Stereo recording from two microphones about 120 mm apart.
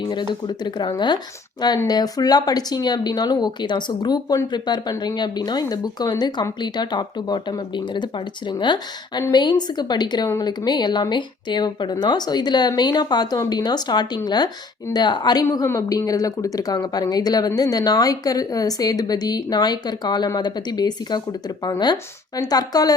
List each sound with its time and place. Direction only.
0.0 s speech: 40° left (ahead or behind)